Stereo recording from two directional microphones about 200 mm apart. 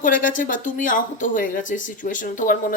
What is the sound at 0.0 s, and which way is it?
Speech, 40° left (ahead or behind).